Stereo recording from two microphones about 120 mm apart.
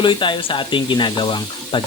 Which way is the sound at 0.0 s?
40° left (ahead or behind).